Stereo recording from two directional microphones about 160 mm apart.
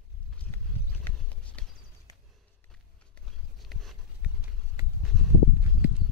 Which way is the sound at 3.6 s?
Centre (ahead or behind).